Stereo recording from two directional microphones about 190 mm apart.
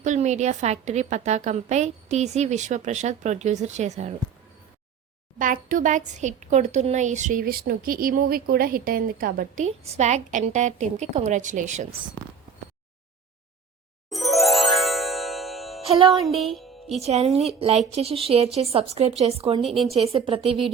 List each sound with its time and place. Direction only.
0.0 s speech: 40° right (ahead or behind)
5.4 s speech: 45° right (ahead or behind)
14.1 s music: centre (ahead or behind)
16.0 s speech: centre (ahead or behind)
17.0 s speech: 35° right (ahead or behind)
19.7 s speech: centre (ahead or behind)
20.0 s speech: 30° right (ahead or behind)